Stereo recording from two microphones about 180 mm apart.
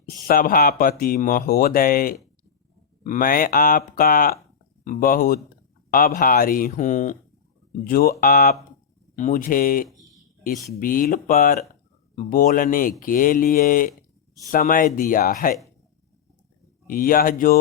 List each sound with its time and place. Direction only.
0.0 s speech: 55° left (ahead or behind)
16.8 s speech: 50° left (ahead or behind)